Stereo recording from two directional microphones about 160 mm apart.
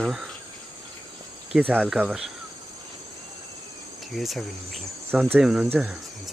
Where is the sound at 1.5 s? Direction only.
5° left (ahead or behind).